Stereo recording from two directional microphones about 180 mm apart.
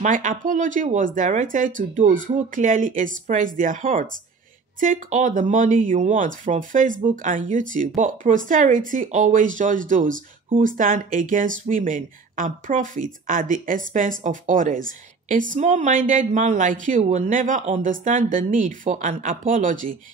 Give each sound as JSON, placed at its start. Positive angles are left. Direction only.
{"t": 0.0, "sound": "speech", "side_deg": -45}